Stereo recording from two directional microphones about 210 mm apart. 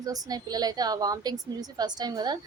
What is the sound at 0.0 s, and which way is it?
A woman's voice, 15° right (ahead or behind).